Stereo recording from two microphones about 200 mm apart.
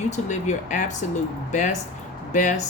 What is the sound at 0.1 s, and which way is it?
A woman's voice, 35° left (ahead or behind).